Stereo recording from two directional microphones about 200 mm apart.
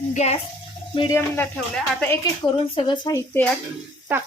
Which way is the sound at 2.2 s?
25° left (ahead or behind).